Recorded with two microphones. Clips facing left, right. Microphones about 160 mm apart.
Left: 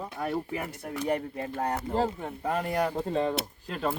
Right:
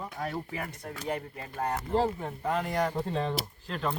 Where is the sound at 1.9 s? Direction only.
Centre (ahead or behind).